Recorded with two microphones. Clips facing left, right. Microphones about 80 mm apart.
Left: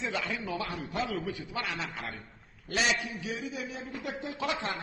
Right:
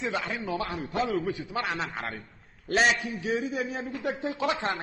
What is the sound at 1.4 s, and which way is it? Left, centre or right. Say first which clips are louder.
Speech: right 5 dB; right.